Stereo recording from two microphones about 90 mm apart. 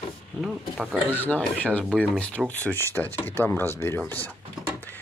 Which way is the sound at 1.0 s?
20° left (ahead or behind).